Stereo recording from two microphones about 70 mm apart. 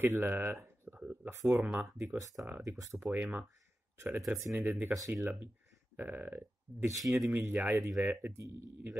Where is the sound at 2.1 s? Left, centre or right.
Right.